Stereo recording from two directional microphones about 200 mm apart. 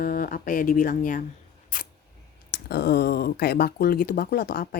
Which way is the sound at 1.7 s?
40° left (ahead or behind).